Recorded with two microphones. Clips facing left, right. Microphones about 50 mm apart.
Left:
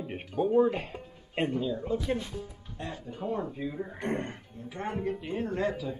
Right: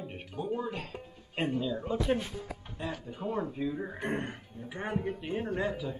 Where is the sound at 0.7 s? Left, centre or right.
Left.